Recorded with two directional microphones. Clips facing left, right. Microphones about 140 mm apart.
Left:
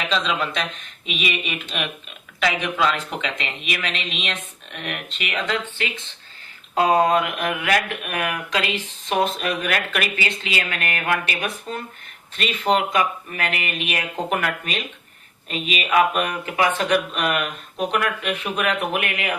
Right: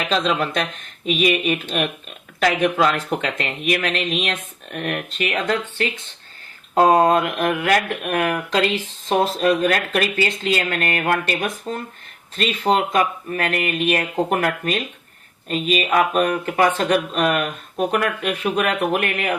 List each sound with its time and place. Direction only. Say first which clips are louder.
0.1 s speech: right 5 dB; 45° right (ahead or behind)